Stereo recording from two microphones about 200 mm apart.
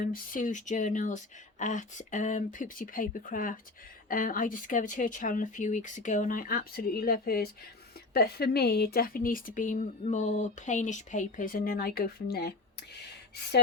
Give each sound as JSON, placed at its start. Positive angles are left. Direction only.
{"t": 0.0, "sound": "speech", "side_deg": 45}